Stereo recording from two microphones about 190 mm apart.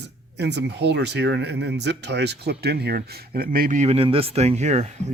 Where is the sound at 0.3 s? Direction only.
65° right (ahead or behind).